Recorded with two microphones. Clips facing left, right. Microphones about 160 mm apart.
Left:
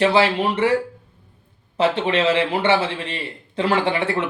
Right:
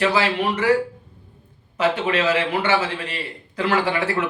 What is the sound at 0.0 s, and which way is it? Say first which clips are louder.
Speech: left 3 dB; 25° left (ahead or behind).